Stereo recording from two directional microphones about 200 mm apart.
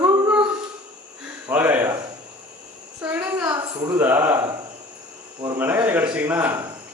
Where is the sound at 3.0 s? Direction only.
10° right (ahead or behind).